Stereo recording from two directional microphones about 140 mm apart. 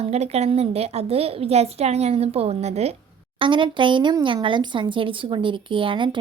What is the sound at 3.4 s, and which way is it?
Speech, 35° right (ahead or behind).